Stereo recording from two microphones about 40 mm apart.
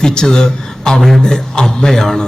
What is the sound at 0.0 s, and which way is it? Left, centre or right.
A man's voice, centre.